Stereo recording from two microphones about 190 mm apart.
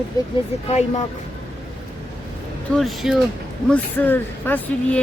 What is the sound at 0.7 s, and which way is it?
Speech, 35° left (ahead or behind).